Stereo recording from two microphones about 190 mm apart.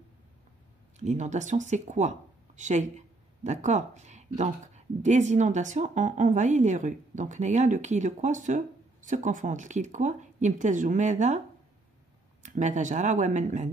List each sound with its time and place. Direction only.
0.9 s speech: 40° right (ahead or behind)
12.4 s speech: 40° right (ahead or behind)